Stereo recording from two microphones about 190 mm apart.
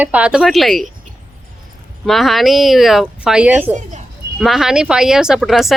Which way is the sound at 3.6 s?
40° right (ahead or behind).